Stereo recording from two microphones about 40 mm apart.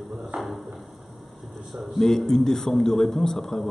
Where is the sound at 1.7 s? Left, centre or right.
Centre.